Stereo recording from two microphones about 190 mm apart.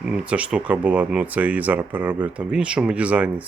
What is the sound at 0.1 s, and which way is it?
Speech, 5° right (ahead or behind).